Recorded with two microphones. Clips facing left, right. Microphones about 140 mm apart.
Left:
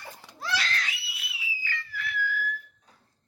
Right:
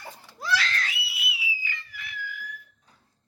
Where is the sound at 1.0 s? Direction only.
10° right (ahead or behind).